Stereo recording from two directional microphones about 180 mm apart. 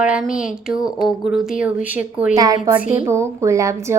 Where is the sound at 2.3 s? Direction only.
20° right (ahead or behind).